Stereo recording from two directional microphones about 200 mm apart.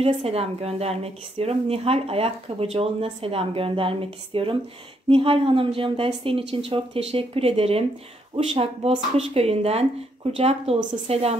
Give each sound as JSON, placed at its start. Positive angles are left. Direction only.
{"t": 0.0, "sound": "a woman's voice", "side_deg": -30}